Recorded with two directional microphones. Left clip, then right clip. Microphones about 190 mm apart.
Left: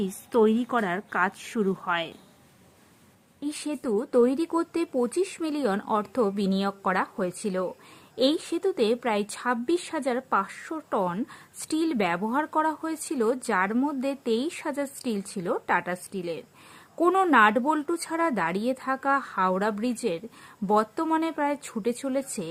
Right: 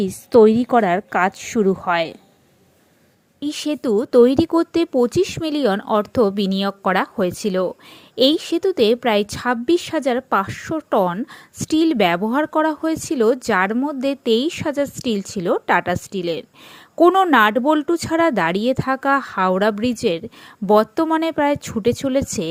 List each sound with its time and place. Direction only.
0.0 s speech: 25° right (ahead or behind)
3.4 s speech: 25° right (ahead or behind)